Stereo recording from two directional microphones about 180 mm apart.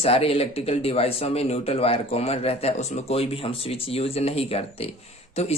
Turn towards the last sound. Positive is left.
turn(degrees=35)  # may be behind; listen again after turning